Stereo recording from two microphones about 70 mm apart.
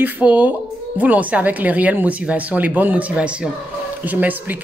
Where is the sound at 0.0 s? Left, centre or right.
Right.